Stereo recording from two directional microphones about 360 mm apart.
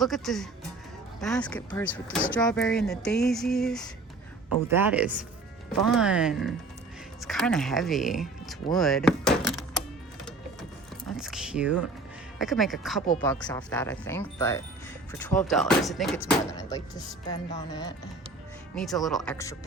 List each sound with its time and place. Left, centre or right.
0.0 s speech: centre
11.2 s speech: centre
18.8 s speech: centre